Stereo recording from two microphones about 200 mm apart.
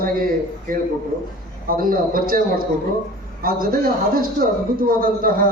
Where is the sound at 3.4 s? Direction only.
45° right (ahead or behind).